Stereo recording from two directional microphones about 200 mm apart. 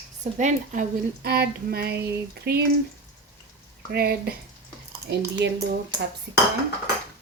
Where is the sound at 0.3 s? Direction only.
35° right (ahead or behind); by 2.6 s 55° right (ahead or behind).